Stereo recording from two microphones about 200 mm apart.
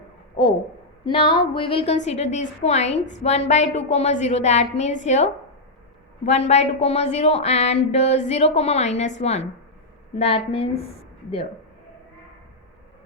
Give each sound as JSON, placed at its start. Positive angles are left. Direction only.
{"t": 1.0, "sound": "a woman's voice", "side_deg": 25}